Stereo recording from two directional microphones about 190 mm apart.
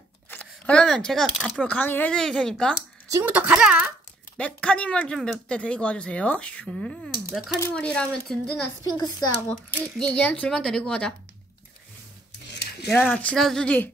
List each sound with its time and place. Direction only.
0.3 s speech: 5° left (ahead or behind)
3.1 s speech: 10° right (ahead or behind)
4.4 s speech: 5° left (ahead or behind)
8.8 s a child's voice: 20° left (ahead or behind)
9.9 s speech: 5° left (ahead or behind)
12.8 s speech: 5° left (ahead or behind)